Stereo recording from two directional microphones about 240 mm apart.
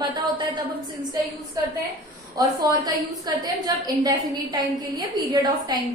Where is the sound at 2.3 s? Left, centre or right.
Centre.